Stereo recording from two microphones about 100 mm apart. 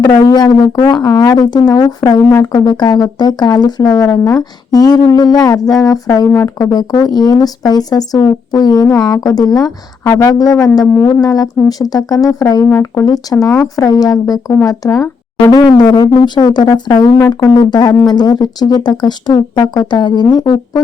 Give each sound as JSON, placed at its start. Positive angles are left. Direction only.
{"t": 0.0, "sound": "speech", "side_deg": 45}
{"t": 6.3, "sound": "speech", "side_deg": 25}
{"t": 6.7, "sound": "speech", "side_deg": 40}
{"t": 15.4, "sound": "speech", "side_deg": 40}